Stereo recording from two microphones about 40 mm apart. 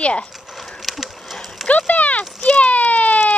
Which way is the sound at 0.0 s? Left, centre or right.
Left.